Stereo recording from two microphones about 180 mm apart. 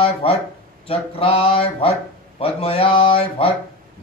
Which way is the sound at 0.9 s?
30° left (ahead or behind).